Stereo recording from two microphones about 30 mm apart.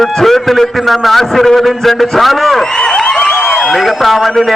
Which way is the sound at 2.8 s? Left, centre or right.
Left.